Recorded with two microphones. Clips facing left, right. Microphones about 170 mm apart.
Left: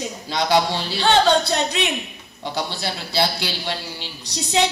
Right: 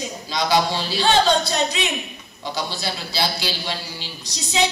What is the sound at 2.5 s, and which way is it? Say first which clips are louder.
A man's voice: left 1 dB; 60° left (ahead or behind).